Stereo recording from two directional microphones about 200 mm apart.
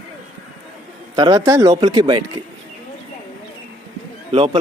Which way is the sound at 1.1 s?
20° right (ahead or behind).